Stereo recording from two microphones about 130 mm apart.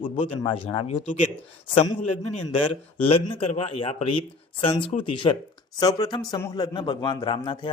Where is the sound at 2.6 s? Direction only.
45° left (ahead or behind).